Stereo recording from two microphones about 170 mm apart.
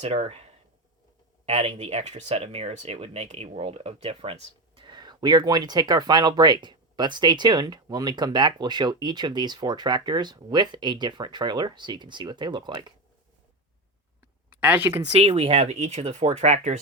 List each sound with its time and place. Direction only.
0.0 s speech: 35° right (ahead or behind)
1.5 s speech: 35° right (ahead or behind)
14.6 s speech: 10° right (ahead or behind)
15.1 s speech: 40° right (ahead or behind)